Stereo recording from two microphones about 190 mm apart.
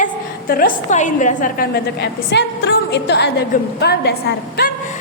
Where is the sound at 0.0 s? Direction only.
50° left (ahead or behind).